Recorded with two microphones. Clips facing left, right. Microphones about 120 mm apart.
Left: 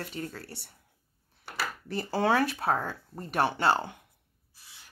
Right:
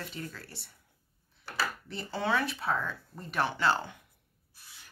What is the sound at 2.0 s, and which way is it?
Speech, 40° left (ahead or behind).